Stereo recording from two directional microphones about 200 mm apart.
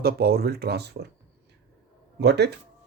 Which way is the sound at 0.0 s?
50° right (ahead or behind).